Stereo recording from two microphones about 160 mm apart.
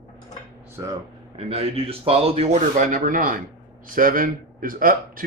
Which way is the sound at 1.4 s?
40° right (ahead or behind).